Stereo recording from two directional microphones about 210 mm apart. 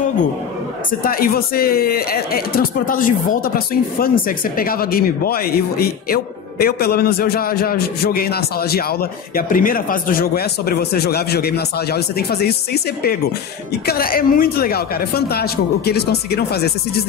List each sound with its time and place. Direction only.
1.0 s speech: 45° left (ahead or behind)